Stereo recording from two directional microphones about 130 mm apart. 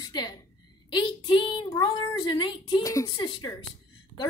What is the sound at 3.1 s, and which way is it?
Speech, 40° left (ahead or behind).